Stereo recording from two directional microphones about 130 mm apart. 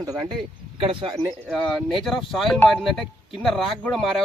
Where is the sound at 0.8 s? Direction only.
40° right (ahead or behind).